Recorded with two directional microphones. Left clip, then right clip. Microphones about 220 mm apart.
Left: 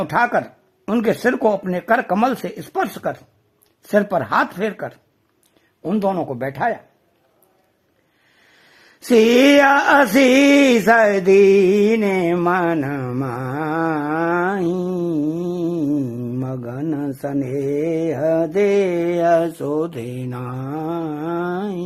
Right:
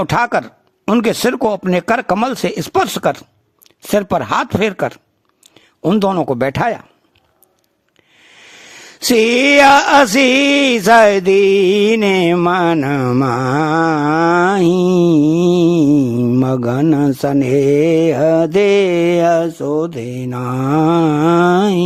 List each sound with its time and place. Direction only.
0.0 s music: 30° right (ahead or behind)
5.4 s speech: 35° right (ahead or behind)
8.7 s music: 30° right (ahead or behind)